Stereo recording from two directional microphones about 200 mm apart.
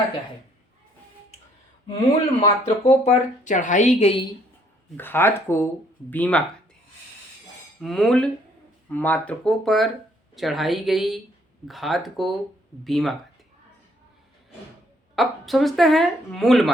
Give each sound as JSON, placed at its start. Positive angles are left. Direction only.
{"t": 2.4, "sound": "speech", "side_deg": 35}
{"t": 4.9, "sound": "speech", "side_deg": 10}
{"t": 7.8, "sound": "a woman's voice", "side_deg": 0}
{"t": 15.1, "sound": "a woman's voice", "side_deg": 0}